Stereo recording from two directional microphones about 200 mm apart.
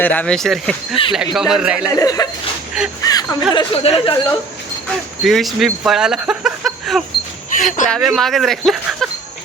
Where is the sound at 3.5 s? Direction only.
25° left (ahead or behind).